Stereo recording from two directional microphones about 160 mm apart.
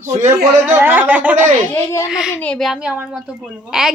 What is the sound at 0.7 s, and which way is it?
A woman's voice, 15° right (ahead or behind).